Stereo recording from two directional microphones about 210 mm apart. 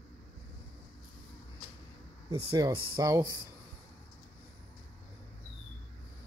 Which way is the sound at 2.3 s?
25° right (ahead or behind).